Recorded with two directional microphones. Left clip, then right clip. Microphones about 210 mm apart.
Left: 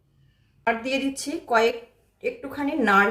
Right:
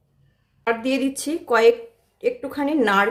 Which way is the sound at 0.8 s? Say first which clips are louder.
Right 3 dB; 50° right (ahead or behind).